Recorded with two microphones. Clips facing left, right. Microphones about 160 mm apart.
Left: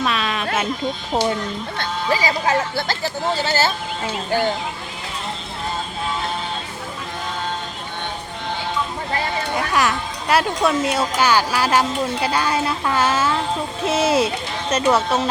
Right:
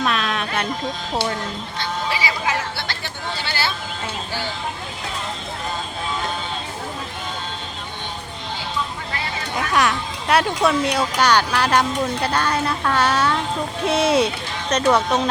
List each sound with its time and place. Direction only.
0.0 s a sound: centre (ahead or behind)
1.8 s speech: 40° left (ahead or behind)
9.7 s speech: centre (ahead or behind)